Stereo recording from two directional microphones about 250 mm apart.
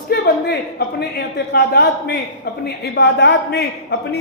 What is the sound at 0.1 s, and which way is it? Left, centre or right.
A woman's voice, left.